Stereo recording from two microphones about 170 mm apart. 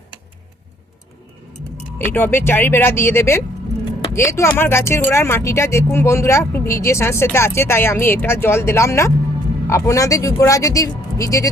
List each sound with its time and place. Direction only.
2.0 s speech: 10° left (ahead or behind)